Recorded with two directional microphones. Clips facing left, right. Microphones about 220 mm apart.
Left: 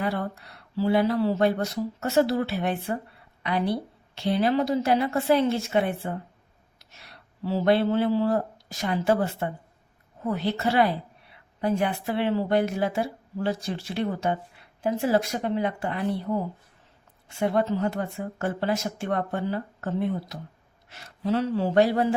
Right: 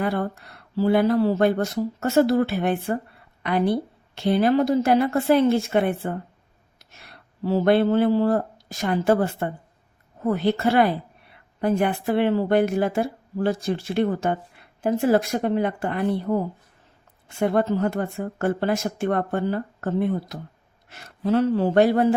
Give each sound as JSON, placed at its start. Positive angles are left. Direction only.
{"t": 0.0, "sound": "speech", "side_deg": -50}
{"t": 17.2, "sound": "speech", "side_deg": -50}